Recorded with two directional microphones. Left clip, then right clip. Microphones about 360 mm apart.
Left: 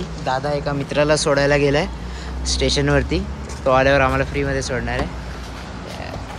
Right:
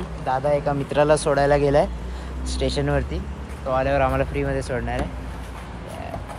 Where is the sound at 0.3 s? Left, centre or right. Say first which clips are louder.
Even; centre.